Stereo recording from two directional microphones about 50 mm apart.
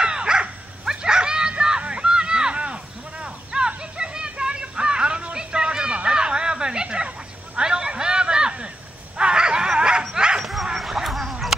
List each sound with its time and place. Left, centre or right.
0.0 s dog: centre
5.9 s a sound: centre
9.1 s dog: centre
10.1 s bow-wow: centre
10.4 s dog: centre